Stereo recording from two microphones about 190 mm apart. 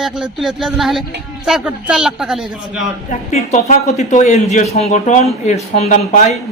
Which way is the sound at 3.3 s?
35° left (ahead or behind).